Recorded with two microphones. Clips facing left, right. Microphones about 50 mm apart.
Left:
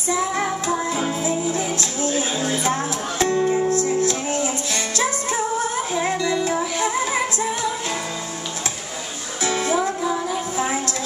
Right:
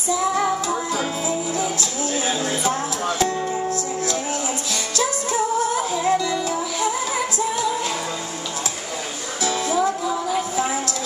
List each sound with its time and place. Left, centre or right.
0.1 s music: left
9.4 s music: left